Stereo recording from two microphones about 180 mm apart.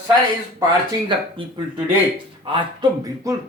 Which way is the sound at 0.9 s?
25° right (ahead or behind).